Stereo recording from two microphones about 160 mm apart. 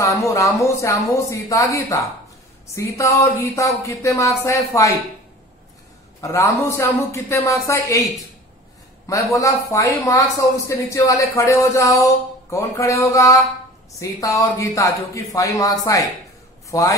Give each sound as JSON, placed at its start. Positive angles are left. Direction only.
{"t": 0.0, "sound": "a man's voice", "side_deg": 20}
{"t": 6.2, "sound": "a man's voice", "side_deg": 20}
{"t": 9.0, "sound": "a man's voice", "side_deg": 20}